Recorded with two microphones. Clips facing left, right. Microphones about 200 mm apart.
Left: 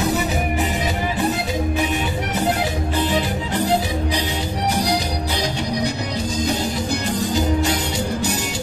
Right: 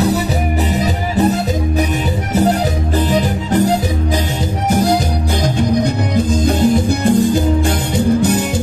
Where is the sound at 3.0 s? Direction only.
45° right (ahead or behind).